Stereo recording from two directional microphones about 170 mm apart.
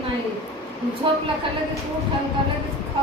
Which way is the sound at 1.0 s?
30° right (ahead or behind).